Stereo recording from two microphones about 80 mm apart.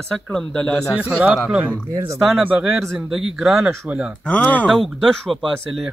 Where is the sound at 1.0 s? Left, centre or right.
Centre.